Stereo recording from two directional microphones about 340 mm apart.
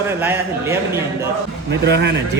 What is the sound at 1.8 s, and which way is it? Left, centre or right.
Speech, right.